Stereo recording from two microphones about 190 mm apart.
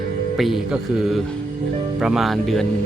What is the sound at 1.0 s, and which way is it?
Speech, centre (ahead or behind).